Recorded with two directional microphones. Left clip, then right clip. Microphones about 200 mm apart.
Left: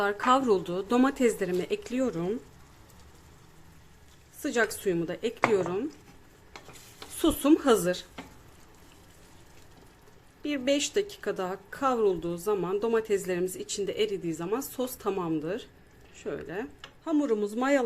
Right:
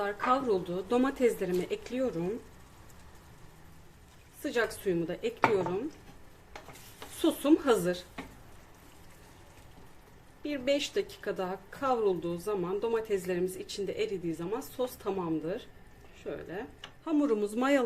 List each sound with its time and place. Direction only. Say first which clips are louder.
0.0 s speech: left 5 dB; 25° left (ahead or behind)
4.4 s speech: left 3 dB; 20° left (ahead or behind)
7.2 s speech: left 3 dB; 20° left (ahead or behind)
10.4 s speech: left 3 dB; 20° left (ahead or behind)
17.0 s speech: left 2 dB; 10° left (ahead or behind)